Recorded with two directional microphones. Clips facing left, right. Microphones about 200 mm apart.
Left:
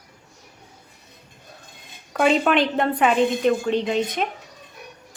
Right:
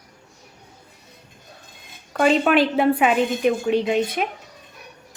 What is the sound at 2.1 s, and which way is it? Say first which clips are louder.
A woman's voice: right 1 dB; centre (ahead or behind).